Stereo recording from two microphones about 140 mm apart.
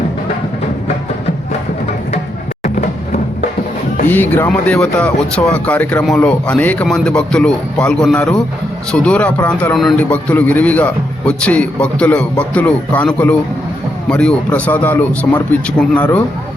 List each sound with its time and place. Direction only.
2.6 s music: 70° left (ahead or behind)
4.1 s a man's voice: 15° left (ahead or behind)